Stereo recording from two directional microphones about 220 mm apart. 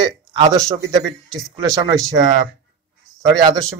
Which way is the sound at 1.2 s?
Centre (ahead or behind).